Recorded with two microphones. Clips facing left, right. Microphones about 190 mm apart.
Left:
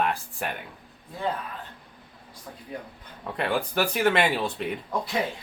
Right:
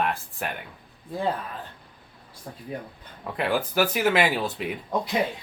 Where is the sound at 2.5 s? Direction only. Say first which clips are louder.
Right 3 dB; 40° right (ahead or behind).